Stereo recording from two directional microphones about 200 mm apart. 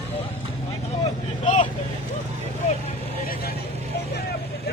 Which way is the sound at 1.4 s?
35° left (ahead or behind).